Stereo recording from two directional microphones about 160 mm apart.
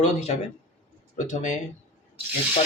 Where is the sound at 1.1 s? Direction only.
50° left (ahead or behind).